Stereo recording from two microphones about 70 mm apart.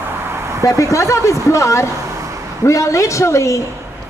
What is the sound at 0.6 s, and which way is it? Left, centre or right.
A man's voice, left.